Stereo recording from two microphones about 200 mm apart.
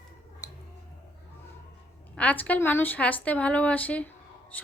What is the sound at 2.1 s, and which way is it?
A woman's voice, 10° left (ahead or behind).